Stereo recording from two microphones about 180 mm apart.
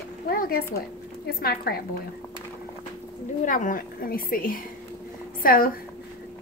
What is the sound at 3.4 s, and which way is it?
A woman's voice, 50° left (ahead or behind).